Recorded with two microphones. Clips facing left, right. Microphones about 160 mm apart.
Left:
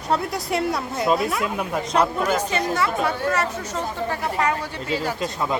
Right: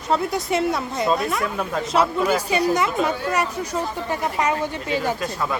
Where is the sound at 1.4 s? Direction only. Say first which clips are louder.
Even; 15° left (ahead or behind).